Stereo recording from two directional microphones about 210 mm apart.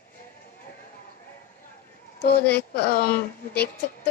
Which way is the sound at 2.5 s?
45° left (ahead or behind).